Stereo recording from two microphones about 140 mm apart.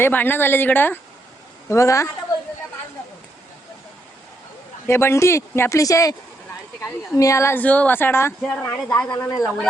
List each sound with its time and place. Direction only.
0.0 s a woman's voice: 15° left (ahead or behind)
4.9 s a woman's voice: 20° left (ahead or behind)
9.1 s speech: 25° left (ahead or behind)